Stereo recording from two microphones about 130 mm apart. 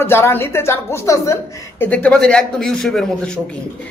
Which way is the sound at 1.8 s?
10° left (ahead or behind).